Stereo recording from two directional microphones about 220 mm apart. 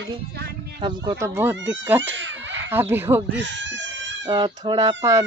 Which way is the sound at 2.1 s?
55° right (ahead or behind).